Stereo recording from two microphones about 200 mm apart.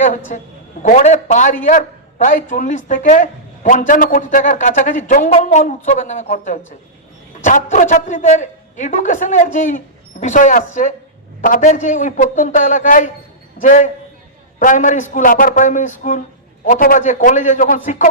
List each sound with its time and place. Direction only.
0.8 s a man's voice: 35° left (ahead or behind)